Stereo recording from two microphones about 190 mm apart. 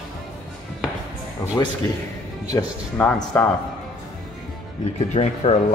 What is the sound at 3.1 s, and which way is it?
Speech, 10° left (ahead or behind).